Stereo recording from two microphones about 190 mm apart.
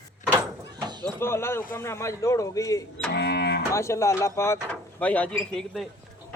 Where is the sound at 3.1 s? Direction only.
65° left (ahead or behind).